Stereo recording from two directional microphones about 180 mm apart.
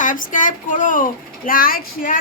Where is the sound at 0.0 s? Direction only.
45° left (ahead or behind).